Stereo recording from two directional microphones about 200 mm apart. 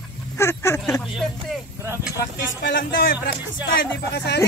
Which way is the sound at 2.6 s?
65° left (ahead or behind).